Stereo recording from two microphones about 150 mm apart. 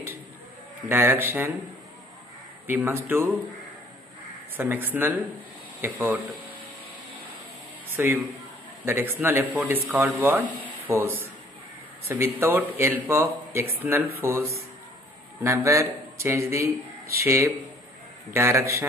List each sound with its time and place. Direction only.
0.8 s speech: 15° right (ahead or behind)
2.6 s speech: 15° right (ahead or behind)
4.6 s speech: 15° right (ahead or behind)
7.9 s a man's voice: 15° right (ahead or behind)